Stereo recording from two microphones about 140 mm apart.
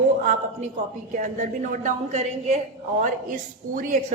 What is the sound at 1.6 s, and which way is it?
Speech, 60° right (ahead or behind).